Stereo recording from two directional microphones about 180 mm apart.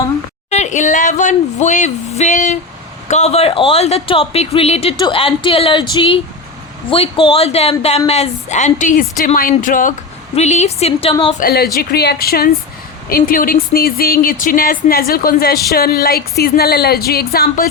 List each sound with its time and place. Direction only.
0.5 s a woman's voice: 40° left (ahead or behind)
11.3 s speech: 55° left (ahead or behind)